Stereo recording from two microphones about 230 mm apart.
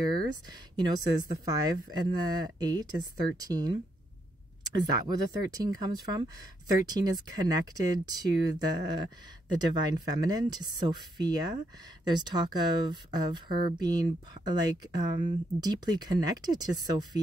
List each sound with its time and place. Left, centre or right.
0.0 s speech: centre
5.0 s speech: centre